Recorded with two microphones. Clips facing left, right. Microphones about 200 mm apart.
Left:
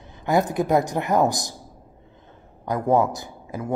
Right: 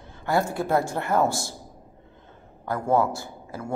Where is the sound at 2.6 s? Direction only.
15° left (ahead or behind).